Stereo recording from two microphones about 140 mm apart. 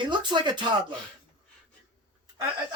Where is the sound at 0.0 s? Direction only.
35° right (ahead or behind).